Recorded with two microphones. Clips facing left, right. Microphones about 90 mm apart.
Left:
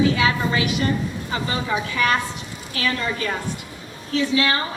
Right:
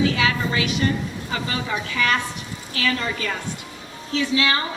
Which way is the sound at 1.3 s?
30° left (ahead or behind).